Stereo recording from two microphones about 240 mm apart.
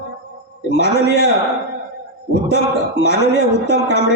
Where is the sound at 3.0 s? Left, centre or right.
Left.